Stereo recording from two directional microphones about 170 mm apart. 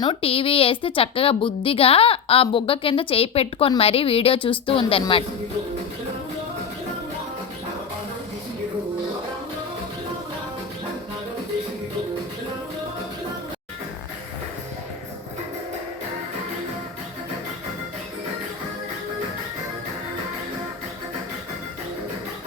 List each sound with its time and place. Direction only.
0.0 s a woman's voice: 35° left (ahead or behind)